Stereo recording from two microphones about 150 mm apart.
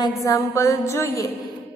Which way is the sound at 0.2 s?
20° left (ahead or behind).